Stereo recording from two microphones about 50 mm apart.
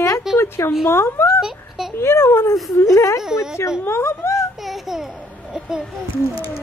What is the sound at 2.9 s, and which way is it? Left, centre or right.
Speech, left.